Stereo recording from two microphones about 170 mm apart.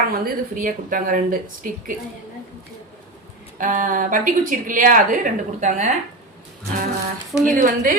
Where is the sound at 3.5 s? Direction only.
50° right (ahead or behind).